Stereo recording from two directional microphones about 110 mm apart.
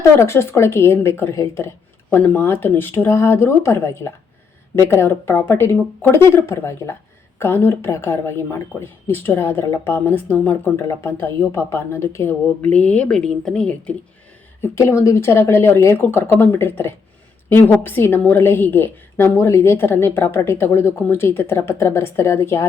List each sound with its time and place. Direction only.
0.2 s a woman's voice: 25° left (ahead or behind)
14.6 s a woman's voice: 25° left (ahead or behind)